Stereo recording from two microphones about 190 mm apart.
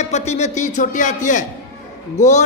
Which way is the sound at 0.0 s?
35° left (ahead or behind).